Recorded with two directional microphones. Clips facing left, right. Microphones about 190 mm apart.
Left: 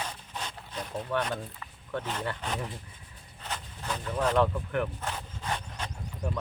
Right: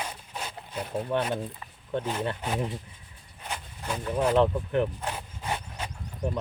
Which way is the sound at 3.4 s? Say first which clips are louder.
Right 1 dB; 10° right (ahead or behind).